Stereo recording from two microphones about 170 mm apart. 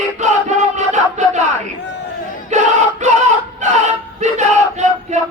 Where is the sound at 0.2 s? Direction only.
45° right (ahead or behind).